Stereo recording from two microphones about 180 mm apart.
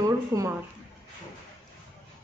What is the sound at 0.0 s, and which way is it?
Speech, 15° right (ahead or behind).